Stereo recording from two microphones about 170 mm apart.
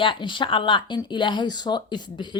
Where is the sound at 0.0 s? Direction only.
30° left (ahead or behind).